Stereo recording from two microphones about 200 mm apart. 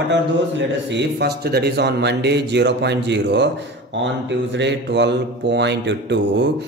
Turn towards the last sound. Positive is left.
turn(degrees=-60)  # may be behind; listen again after turning